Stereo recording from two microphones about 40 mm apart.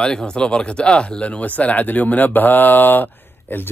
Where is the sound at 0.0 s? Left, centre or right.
Centre.